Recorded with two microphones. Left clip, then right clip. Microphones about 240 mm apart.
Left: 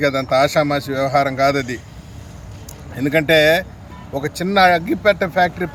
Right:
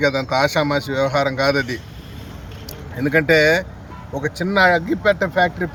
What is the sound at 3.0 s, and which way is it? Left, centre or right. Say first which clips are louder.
Speech: left 1 dB; centre.